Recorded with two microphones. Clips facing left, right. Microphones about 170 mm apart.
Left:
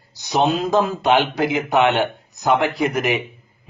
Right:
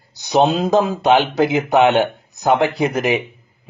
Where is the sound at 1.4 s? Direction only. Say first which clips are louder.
Right 4 dB; 40° right (ahead or behind).